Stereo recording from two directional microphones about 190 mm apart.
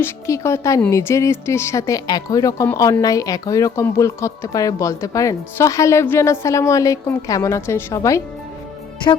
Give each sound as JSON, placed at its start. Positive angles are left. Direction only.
{"t": 0.0, "sound": "a woman's voice", "side_deg": 15}